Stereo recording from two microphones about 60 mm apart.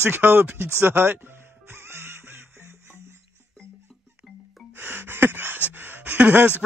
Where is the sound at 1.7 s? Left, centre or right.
Right.